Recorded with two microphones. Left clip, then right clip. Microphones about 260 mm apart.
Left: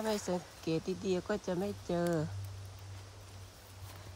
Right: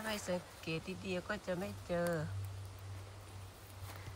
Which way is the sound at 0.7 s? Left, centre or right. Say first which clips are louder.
Left 8 dB; left.